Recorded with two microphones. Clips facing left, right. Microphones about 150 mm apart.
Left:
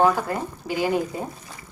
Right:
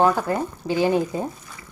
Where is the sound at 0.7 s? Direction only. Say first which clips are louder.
Right 3 dB; 25° right (ahead or behind).